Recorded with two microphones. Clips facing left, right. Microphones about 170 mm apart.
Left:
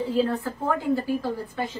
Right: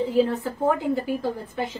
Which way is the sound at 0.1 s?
20° right (ahead or behind).